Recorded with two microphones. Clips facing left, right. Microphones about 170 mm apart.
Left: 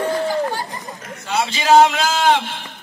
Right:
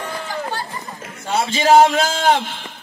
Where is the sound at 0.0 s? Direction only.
10° left (ahead or behind).